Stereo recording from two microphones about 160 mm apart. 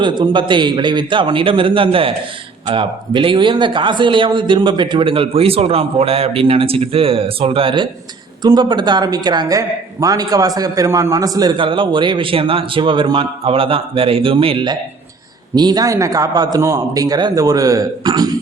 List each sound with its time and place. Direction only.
0.0 s speech: 30° right (ahead or behind)